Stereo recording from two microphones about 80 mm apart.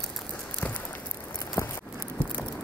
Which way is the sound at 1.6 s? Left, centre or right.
Left.